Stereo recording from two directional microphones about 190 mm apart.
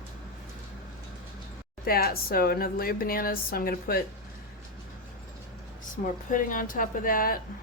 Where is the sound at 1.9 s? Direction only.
50° left (ahead or behind).